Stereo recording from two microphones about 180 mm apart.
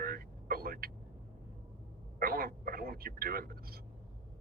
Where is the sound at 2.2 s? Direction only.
55° right (ahead or behind).